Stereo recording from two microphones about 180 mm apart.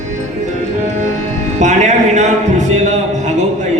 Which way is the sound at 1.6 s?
40° right (ahead or behind).